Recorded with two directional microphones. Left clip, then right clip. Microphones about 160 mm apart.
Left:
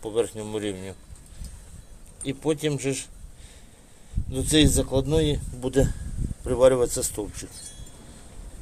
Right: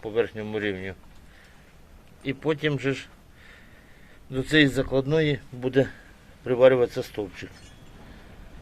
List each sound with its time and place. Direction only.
0.0 s speech: 15° left (ahead or behind)
2.2 s speech: 15° left (ahead or behind)
4.3 s speech: 10° left (ahead or behind)